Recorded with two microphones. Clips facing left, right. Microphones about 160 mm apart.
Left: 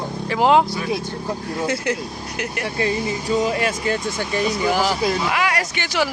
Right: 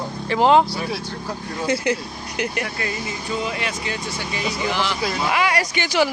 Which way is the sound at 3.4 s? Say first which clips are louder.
Left 5 dB; 40° left (ahead or behind).